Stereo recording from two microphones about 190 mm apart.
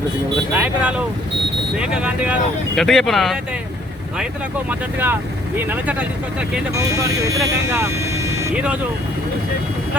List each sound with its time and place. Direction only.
0.5 s speech: 10° right (ahead or behind)
4.7 s speech: 10° right (ahead or behind)